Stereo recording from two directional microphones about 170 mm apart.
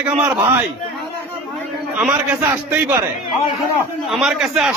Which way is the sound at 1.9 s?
5° right (ahead or behind).